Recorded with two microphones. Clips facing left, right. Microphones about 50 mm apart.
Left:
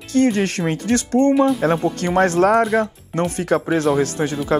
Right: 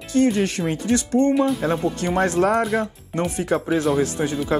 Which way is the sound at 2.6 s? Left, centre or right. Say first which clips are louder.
Left 4 dB; centre.